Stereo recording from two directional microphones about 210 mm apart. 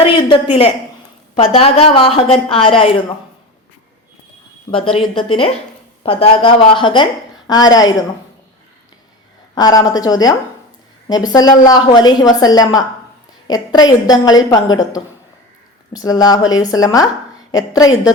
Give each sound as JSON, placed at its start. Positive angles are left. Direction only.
{"t": 0.0, "sound": "a sound", "side_deg": 25}
{"t": 1.4, "sound": "a woman's voice", "side_deg": 25}
{"t": 4.7, "sound": "a woman's voice", "side_deg": 25}
{"t": 9.6, "sound": "a woman's voice", "side_deg": 20}